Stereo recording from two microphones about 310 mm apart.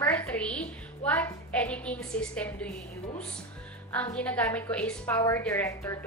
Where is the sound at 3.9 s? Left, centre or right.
Centre.